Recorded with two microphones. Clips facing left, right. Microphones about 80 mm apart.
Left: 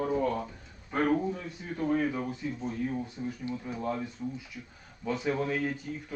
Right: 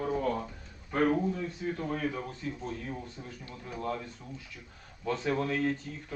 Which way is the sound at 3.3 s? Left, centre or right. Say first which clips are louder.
Left 8 dB; centre.